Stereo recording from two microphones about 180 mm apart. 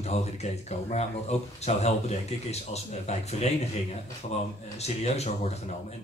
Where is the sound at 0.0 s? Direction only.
35° left (ahead or behind).